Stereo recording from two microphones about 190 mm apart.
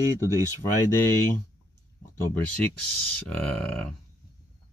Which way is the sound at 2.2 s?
5° left (ahead or behind).